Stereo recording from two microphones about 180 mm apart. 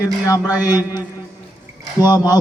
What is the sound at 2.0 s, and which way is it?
Speech, 20° left (ahead or behind).